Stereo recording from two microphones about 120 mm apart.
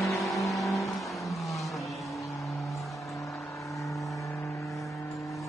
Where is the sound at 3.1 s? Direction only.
25° left (ahead or behind).